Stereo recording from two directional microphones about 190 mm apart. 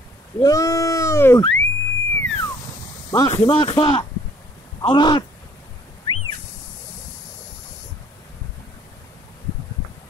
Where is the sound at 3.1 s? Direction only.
20° left (ahead or behind).